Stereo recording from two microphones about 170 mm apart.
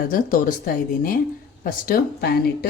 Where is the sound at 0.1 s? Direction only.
55° left (ahead or behind).